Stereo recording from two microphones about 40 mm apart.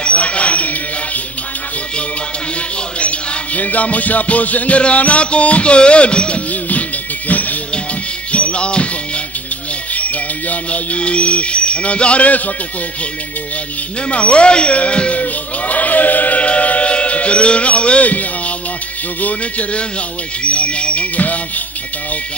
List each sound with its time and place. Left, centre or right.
0.0 s a sound: left
3.0 s music: left
7.2 s music: left
9.9 s speech: left
14.1 s speech: left
20.4 s a sound: left